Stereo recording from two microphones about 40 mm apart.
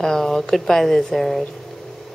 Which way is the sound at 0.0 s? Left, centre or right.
Centre.